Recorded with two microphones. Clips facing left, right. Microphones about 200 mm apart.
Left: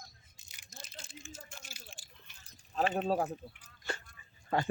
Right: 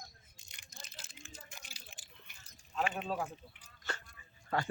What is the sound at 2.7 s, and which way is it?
Speech, 35° left (ahead or behind).